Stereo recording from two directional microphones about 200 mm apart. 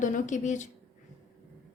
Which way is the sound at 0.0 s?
40° left (ahead or behind).